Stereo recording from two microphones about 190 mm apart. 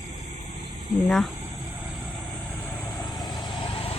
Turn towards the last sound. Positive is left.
turn(degrees=30)  # may be behind; listen again after turning